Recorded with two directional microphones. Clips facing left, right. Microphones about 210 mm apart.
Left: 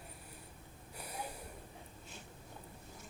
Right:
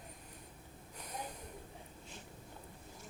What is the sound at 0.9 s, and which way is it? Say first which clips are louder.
Snort: left 1 dB; 10° left (ahead or behind).